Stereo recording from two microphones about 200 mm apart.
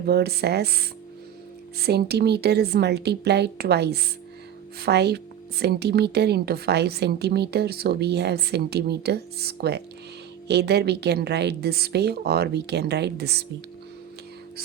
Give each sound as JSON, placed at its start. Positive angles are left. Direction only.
{"t": 0.0, "sound": "a woman's voice", "side_deg": -55}